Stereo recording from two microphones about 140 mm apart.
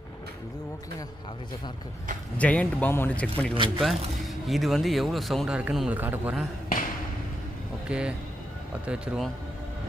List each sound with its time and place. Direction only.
2.3 s speech: 10° left (ahead or behind)
3.5 s speech: 35° right (ahead or behind)
3.8 s speech: centre (ahead or behind)
7.9 s speech: 10° right (ahead or behind)